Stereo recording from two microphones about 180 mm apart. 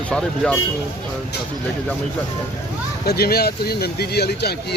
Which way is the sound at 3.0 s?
60° left (ahead or behind).